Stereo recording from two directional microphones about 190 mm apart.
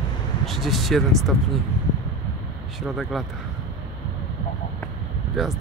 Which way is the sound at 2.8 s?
Centre (ahead or behind).